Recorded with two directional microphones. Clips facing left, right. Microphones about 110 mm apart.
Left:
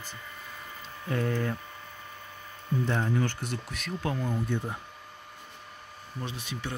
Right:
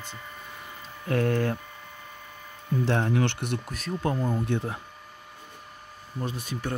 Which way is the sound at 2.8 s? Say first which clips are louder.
Right 4 dB; 70° right (ahead or behind).